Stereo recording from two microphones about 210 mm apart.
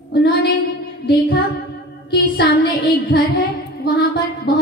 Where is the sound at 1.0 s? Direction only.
60° left (ahead or behind).